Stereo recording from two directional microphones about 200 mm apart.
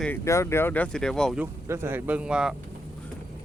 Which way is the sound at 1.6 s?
15° right (ahead or behind).